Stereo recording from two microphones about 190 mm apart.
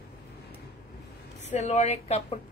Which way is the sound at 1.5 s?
40° left (ahead or behind).